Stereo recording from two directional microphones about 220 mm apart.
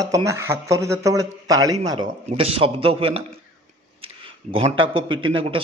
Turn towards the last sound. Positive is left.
turn(degrees=-25)  # may be behind; listen again after turning